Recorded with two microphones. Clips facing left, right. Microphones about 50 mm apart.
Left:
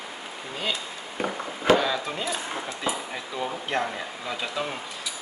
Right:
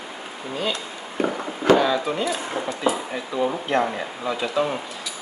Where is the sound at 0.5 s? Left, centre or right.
Centre.